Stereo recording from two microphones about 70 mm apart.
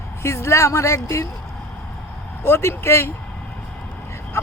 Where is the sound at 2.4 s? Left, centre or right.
Left.